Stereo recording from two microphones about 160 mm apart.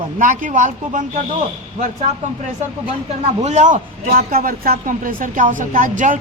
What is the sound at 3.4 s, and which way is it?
Speech, 50° right (ahead or behind).